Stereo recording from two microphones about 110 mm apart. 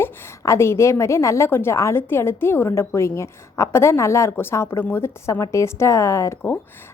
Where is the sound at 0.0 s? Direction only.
25° left (ahead or behind).